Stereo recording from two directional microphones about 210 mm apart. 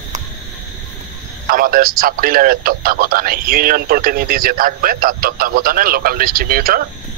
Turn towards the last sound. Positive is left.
turn(degrees=-45)  # may be behind; listen again after turning